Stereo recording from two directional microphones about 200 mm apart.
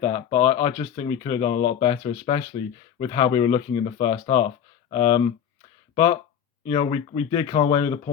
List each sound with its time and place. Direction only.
0.0 s speech: 10° left (ahead or behind)
0.8 s speech: 20° left (ahead or behind)